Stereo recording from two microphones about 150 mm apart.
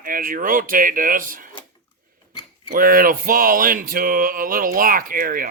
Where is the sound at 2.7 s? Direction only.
70° right (ahead or behind).